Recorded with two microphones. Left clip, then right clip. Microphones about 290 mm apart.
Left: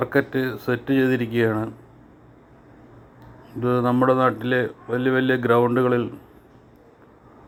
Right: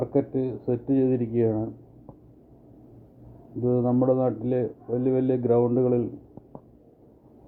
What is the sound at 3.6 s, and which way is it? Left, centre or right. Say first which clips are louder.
Speech: left 4 dB; left.